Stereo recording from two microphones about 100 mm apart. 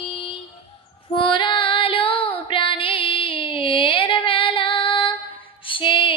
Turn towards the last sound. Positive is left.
turn(degrees=60)  # may be behind; listen again after turning